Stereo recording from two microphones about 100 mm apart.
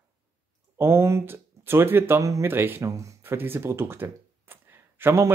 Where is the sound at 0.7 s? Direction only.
25° right (ahead or behind).